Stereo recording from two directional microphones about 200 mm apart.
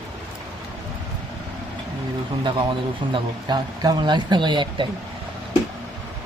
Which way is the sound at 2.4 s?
25° right (ahead or behind).